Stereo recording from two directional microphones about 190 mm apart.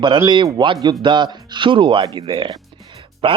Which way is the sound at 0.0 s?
25° right (ahead or behind).